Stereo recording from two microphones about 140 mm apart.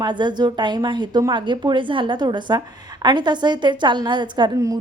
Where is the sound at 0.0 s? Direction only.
35° right (ahead or behind).